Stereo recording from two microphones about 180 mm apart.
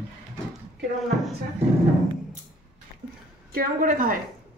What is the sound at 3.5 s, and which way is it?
Speech, 50° right (ahead or behind).